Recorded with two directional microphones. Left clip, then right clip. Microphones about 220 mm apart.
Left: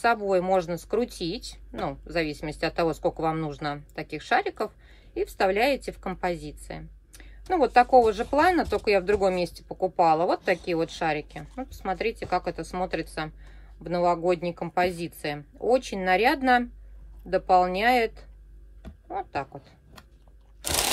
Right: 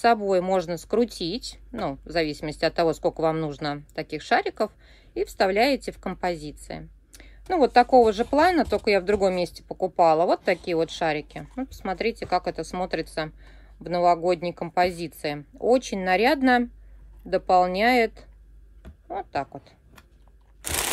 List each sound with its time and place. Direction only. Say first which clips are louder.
0.0 s speech: right 3 dB; 35° right (ahead or behind)
20.6 s crunch: left 2 dB; 5° right (ahead or behind)